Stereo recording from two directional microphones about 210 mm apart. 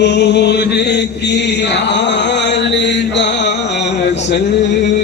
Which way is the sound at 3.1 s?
55° left (ahead or behind).